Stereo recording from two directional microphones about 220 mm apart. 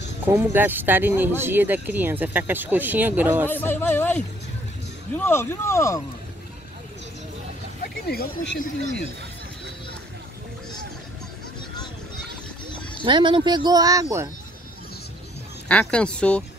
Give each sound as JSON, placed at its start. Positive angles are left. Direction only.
{"t": 0.2, "sound": "speech", "side_deg": -10}
{"t": 3.4, "sound": "speech", "side_deg": 10}
{"t": 7.8, "sound": "speech", "side_deg": 45}
{"t": 13.0, "sound": "speech", "side_deg": -20}
{"t": 15.7, "sound": "speech", "side_deg": 5}